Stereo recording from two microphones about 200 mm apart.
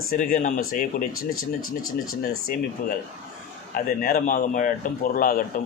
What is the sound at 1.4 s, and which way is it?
Speech, 90° left.